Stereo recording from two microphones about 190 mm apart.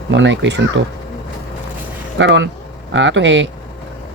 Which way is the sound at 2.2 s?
70° right (ahead or behind).